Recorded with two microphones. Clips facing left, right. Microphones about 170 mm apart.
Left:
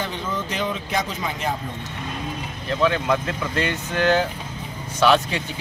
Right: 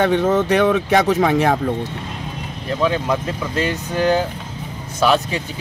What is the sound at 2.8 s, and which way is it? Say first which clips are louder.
Speech: right 1 dB; 5° right (ahead or behind).